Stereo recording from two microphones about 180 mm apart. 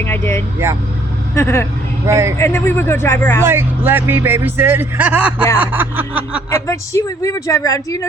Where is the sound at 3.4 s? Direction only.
10° right (ahead or behind).